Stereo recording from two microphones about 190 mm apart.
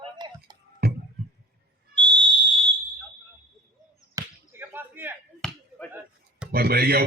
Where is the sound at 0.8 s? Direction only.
55° right (ahead or behind).